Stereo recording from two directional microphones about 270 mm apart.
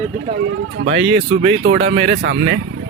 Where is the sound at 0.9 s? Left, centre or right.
Right.